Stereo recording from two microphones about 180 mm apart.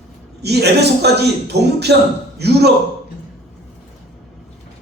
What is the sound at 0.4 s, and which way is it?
Speech, 65° right (ahead or behind).